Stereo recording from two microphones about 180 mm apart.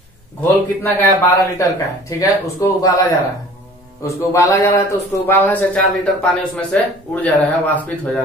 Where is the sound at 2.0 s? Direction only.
15° left (ahead or behind).